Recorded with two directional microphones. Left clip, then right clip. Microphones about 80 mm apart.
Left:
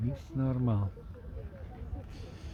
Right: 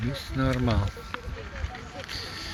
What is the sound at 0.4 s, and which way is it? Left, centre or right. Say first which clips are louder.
Speech: right 8 dB; centre.